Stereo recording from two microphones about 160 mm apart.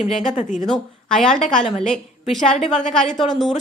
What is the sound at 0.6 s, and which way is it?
Speech, 5° left (ahead or behind).